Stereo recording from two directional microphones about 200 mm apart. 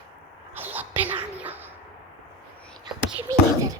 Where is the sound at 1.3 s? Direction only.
10° right (ahead or behind).